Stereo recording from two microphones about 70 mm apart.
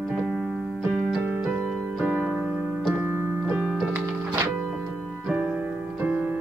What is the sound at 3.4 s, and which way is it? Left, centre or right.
Music, centre.